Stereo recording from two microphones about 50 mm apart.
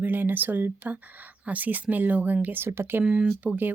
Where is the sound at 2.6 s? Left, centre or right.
Right.